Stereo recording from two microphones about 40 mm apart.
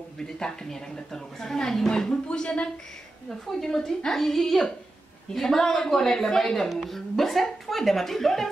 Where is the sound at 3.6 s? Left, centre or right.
Centre.